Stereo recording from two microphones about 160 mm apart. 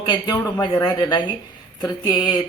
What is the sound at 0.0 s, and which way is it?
A man's voice, 25° left (ahead or behind).